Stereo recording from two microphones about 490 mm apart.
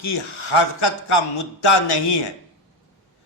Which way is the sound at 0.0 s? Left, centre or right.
Left.